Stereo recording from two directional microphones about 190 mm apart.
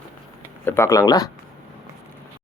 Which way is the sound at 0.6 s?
15° left (ahead or behind).